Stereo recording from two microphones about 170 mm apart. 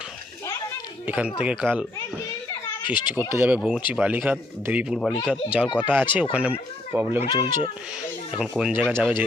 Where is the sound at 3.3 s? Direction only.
10° right (ahead or behind).